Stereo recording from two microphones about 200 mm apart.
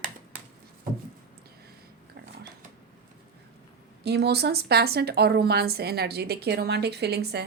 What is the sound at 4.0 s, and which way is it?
A woman's voice, 55° right (ahead or behind).